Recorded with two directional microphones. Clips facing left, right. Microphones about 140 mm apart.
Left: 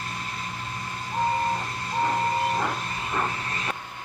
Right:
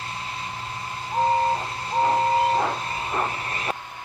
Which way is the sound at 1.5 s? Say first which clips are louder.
Right 3 dB; 30° right (ahead or behind).